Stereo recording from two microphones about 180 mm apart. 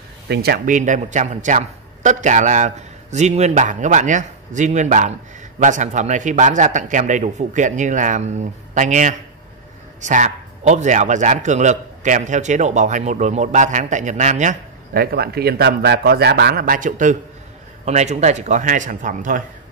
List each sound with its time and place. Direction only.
0.3 s a man's voice: 60° right (ahead or behind)